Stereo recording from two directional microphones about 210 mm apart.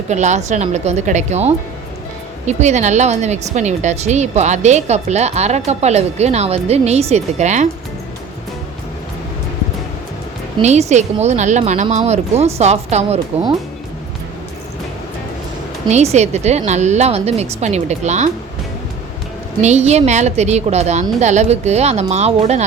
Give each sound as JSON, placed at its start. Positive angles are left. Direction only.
{"t": 0.1, "sound": "a woman's voice", "side_deg": -35}
{"t": 10.6, "sound": "a woman's voice", "side_deg": -30}
{"t": 16.1, "sound": "a woman's voice", "side_deg": -30}
{"t": 19.6, "sound": "a woman's voice", "side_deg": -30}